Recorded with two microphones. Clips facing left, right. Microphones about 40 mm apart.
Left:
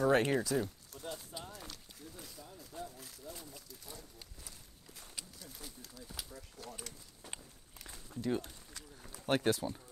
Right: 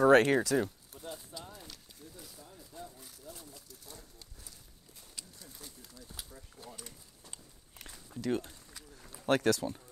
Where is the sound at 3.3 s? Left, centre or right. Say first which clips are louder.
Left 1 dB; centre.